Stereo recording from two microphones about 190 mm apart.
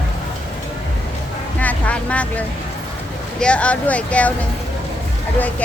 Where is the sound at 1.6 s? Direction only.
5° left (ahead or behind).